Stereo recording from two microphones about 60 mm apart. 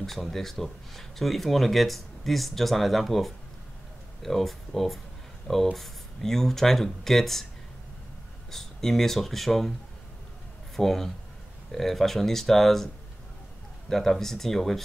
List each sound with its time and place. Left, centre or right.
0.0 s speech: centre
8.5 s speech: centre
10.8 s speech: centre